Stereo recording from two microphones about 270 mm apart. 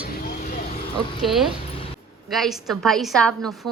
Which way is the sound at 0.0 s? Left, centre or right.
Left.